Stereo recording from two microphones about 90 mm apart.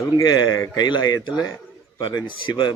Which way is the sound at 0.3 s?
50° left (ahead or behind).